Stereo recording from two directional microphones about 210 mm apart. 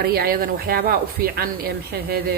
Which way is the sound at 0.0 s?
45° right (ahead or behind).